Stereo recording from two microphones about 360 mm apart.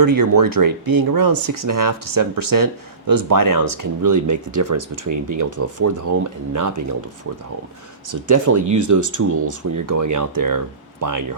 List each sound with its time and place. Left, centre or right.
0.0 s speech: right
8.0 s speech: right